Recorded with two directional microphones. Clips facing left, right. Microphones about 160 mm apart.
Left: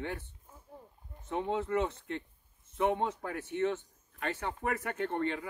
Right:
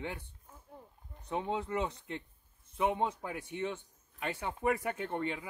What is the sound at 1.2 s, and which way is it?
Speech, 15° right (ahead or behind).